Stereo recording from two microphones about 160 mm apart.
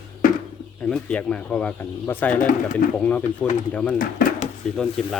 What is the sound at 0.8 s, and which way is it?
A man's voice, 5° left (ahead or behind).